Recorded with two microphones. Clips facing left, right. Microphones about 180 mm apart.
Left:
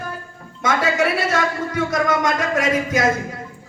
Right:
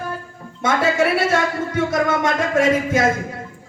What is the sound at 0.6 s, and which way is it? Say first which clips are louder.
A man's voice: right 1 dB; 25° right (ahead or behind).